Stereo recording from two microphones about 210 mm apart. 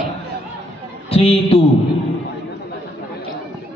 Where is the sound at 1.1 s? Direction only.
30° left (ahead or behind).